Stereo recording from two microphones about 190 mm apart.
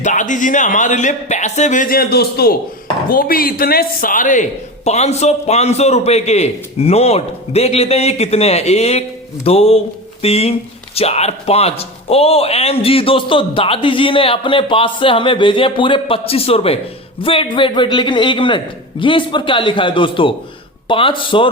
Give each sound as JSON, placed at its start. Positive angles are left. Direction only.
{"t": 0.0, "sound": "a man's voice", "side_deg": 40}